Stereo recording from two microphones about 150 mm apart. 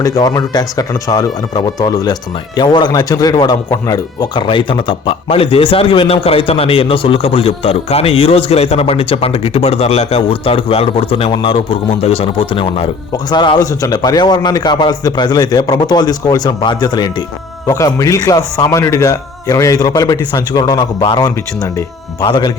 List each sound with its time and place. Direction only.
0.0 s a man's voice: 25° left (ahead or behind)